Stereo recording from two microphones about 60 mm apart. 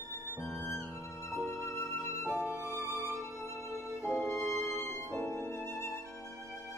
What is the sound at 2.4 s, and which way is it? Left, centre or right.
Music, right.